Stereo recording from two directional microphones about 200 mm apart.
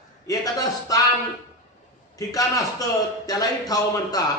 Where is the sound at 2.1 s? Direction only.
15° left (ahead or behind).